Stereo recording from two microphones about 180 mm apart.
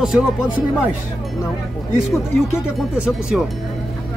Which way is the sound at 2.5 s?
5° right (ahead or behind).